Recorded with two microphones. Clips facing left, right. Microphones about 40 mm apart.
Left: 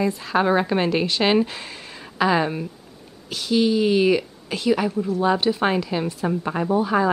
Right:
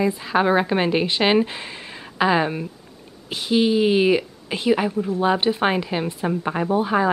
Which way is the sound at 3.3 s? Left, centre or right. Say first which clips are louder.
Right 1 dB; right.